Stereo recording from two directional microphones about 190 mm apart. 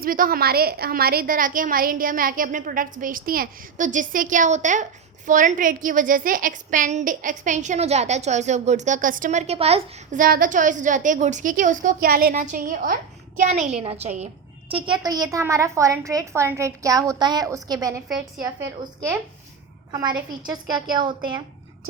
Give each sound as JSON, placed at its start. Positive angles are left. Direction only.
{"t": 0.0, "sound": "a woman's voice", "side_deg": -50}
{"t": 20.4, "sound": "a woman's voice", "side_deg": -20}